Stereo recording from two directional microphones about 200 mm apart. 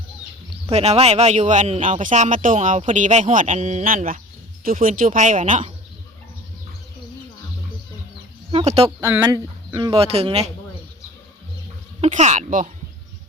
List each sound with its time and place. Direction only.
0.7 s speech: 35° right (ahead or behind)
8.5 s speech: 30° right (ahead or behind)
9.2 s speech: 15° right (ahead or behind)
11.9 s speech: 35° right (ahead or behind)